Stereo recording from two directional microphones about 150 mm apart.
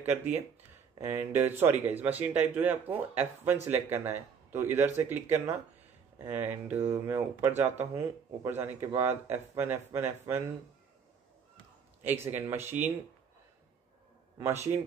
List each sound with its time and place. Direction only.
0.0 s speech: 10° right (ahead or behind)
12.0 s speech: 15° right (ahead or behind)
14.4 s speech: 15° right (ahead or behind)